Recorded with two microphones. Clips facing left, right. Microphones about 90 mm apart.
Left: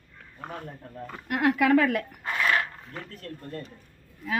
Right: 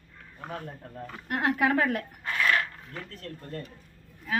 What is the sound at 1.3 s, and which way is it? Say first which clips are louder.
Speech: left 4 dB; 65° left (ahead or behind).